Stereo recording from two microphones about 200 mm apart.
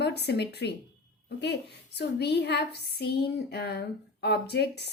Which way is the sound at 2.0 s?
55° left (ahead or behind).